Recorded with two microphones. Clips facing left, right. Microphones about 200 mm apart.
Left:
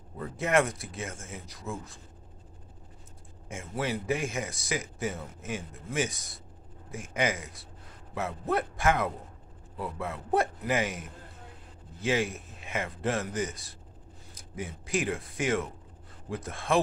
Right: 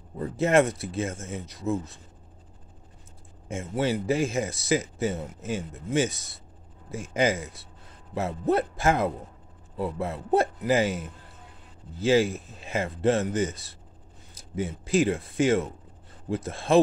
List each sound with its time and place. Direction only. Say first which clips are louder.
0.2 s speech: right 5 dB; 25° right (ahead or behind)
3.4 s speech: right 6 dB; 25° right (ahead or behind)